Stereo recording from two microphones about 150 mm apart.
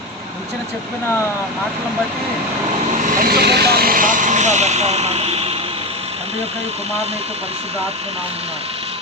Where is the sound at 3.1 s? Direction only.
80° right; by 8.2 s 45° right (ahead or behind).